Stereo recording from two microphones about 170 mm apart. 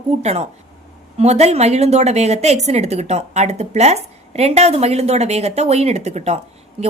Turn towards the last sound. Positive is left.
turn(degrees=-35)  # may be behind; listen again after turning